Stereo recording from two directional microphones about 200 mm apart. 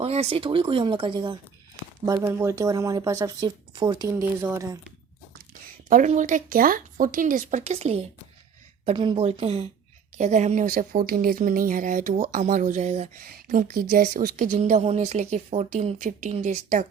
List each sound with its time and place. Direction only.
0.0 s speech: 30° right (ahead or behind); by 4.8 s 15° right (ahead or behind)
5.9 s speech: 40° right (ahead or behind)